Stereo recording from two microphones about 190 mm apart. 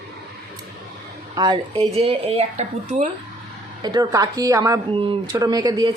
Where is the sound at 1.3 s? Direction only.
20° right (ahead or behind).